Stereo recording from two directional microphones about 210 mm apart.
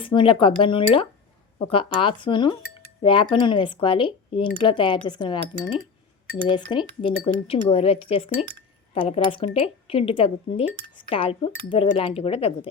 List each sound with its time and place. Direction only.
0.0 s speech: 25° left (ahead or behind)